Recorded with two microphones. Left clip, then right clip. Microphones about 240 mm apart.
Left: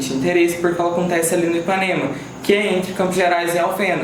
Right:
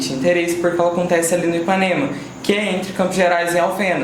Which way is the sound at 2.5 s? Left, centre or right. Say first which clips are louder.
Left 2 dB; right.